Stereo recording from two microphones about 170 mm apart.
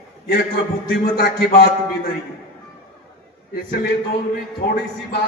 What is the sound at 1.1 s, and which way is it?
Speech, 75° left (ahead or behind).